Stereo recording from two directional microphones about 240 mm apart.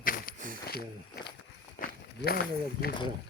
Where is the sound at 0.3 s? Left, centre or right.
Right.